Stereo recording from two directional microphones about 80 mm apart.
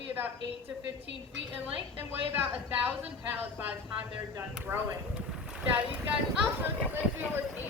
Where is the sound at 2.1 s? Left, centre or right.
Right.